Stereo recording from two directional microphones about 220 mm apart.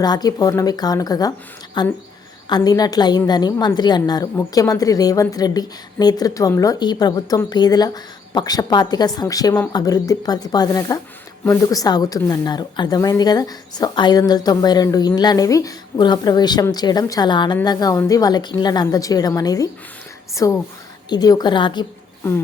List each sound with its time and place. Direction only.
0.0 s a woman's voice: 20° left (ahead or behind)